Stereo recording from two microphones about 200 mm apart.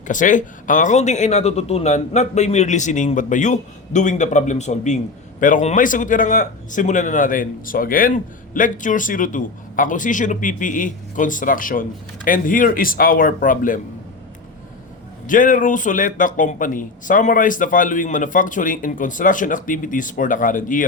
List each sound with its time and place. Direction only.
0.1 s speech: 40° left (ahead or behind)
15.3 s speech: 40° left (ahead or behind)